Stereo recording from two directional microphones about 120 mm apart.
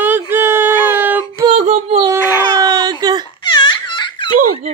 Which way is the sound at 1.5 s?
65° right (ahead or behind).